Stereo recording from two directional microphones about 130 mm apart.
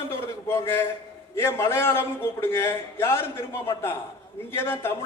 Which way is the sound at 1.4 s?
20° left (ahead or behind).